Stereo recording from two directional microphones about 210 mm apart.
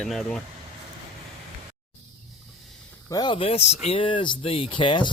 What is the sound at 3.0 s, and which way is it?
Speech, 20° left (ahead or behind).